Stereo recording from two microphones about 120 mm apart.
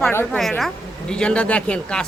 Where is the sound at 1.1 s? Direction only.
10° left (ahead or behind).